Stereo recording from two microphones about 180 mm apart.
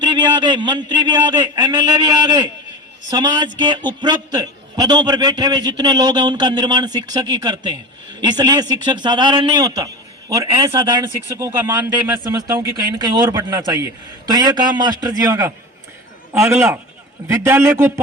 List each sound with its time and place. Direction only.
0.0 s a man's voice: 25° right (ahead or behind)